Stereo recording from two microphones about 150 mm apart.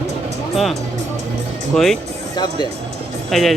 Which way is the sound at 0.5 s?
Centre (ahead or behind).